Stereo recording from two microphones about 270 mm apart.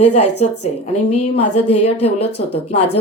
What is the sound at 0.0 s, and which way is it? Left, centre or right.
Speech, left.